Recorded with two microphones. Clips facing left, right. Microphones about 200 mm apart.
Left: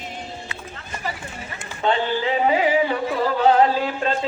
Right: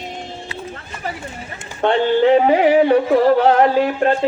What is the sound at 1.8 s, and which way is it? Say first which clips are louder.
Speech: right 7 dB; 60° right (ahead or behind).